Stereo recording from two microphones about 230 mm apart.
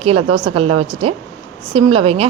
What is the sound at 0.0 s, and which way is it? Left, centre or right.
A woman's voice, right.